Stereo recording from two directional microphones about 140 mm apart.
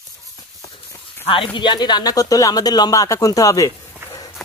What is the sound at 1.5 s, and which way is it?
Speech, 30° left (ahead or behind).